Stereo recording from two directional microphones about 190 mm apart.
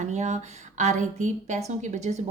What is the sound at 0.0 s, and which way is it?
A woman's voice, 40° right (ahead or behind).